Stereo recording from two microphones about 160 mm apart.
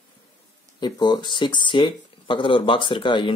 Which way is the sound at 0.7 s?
25° left (ahead or behind).